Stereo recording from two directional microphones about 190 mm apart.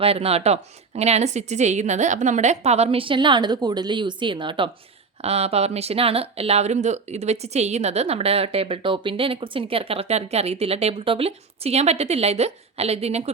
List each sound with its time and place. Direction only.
0.0 s speech: 30° right (ahead or behind)